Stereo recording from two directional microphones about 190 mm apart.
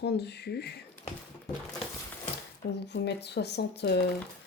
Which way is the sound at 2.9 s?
60° left (ahead or behind).